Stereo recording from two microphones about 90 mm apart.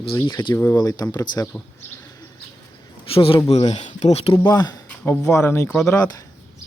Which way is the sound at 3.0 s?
90° left.